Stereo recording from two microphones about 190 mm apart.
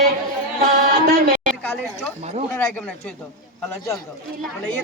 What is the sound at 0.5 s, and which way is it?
Music, 50° right (ahead or behind).